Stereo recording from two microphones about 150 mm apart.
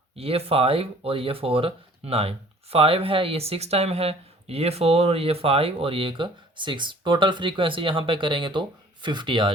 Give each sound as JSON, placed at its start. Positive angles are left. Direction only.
{"t": 0.2, "sound": "speech", "side_deg": -40}